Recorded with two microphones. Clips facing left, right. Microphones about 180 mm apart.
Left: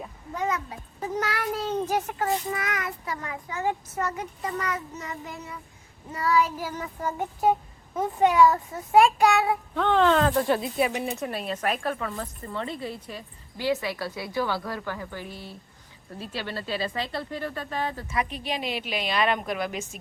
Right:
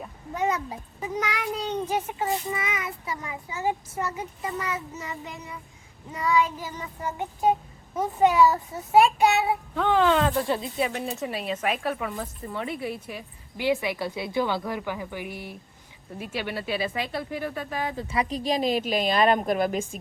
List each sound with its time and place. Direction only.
0.3 s child singing: 25° right (ahead or behind)
0.9 s a child's voice: 10° right (ahead or behind)
1.5 s speech: 5° left (ahead or behind)
3.1 s speech: 10° right (ahead or behind)
5.2 s speech: 20° right (ahead or behind)
6.1 s speech: 5° left (ahead or behind)
8.9 s child singing: 25° right (ahead or behind)
9.7 s speech: 5° right (ahead or behind)
18.1 s a woman's voice: 35° right (ahead or behind)